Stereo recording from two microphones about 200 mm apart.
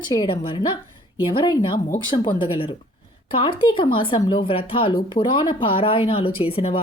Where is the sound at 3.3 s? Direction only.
25° left (ahead or behind).